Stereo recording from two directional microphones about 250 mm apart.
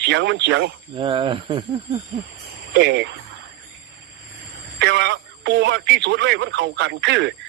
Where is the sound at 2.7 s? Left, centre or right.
Right.